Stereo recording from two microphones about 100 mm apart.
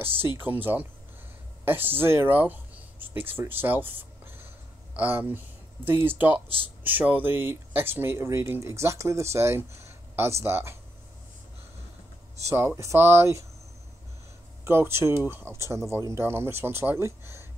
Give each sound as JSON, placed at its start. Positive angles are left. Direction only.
{"t": 0.0, "sound": "speech", "side_deg": -20}
{"t": 4.9, "sound": "speech", "side_deg": -20}
{"t": 12.4, "sound": "speech", "side_deg": -25}
{"t": 14.6, "sound": "speech", "side_deg": -25}